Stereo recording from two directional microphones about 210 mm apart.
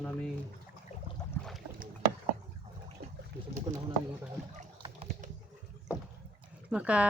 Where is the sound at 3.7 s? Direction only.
20° right (ahead or behind).